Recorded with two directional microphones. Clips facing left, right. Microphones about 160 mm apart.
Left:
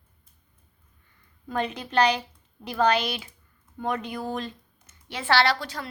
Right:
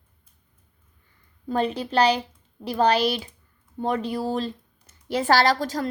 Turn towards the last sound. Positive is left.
turn(degrees=-40)  # may be behind; listen again after turning